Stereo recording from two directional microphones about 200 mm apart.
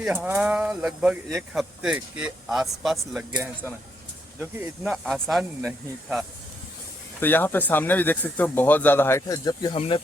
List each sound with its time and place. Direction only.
0.0 s speech: 5° right (ahead or behind)
7.2 s speech: 10° left (ahead or behind)
9.7 s speech: 30° left (ahead or behind)